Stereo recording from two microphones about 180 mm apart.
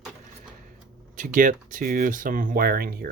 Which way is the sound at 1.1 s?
45° right (ahead or behind).